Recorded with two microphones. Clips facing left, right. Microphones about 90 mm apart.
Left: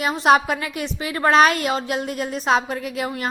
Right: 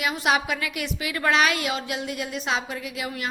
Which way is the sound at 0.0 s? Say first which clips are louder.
Left 7 dB; 35° left (ahead or behind).